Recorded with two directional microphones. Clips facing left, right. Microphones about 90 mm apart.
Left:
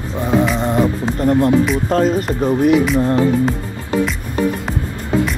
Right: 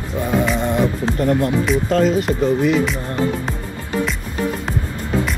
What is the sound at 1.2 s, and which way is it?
Speech, 25° left (ahead or behind).